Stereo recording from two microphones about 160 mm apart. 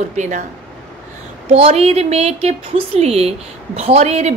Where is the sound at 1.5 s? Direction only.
35° right (ahead or behind).